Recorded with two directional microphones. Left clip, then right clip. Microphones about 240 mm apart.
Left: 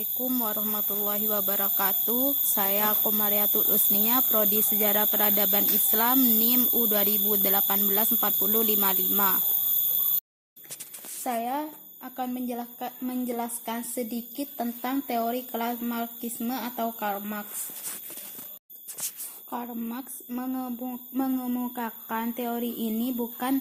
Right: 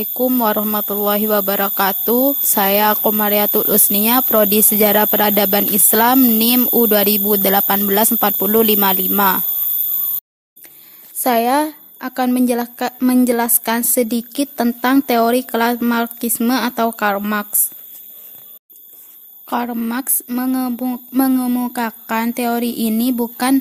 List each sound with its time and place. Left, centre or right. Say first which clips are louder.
0.2 s speech: right 16 dB; right
11.2 s speech: right 15 dB; right
19.5 s speech: right 14 dB; right